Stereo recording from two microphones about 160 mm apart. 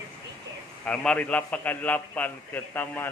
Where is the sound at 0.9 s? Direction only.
5° left (ahead or behind).